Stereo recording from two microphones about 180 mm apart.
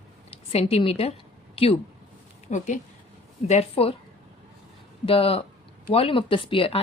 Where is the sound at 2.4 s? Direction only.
40° left (ahead or behind).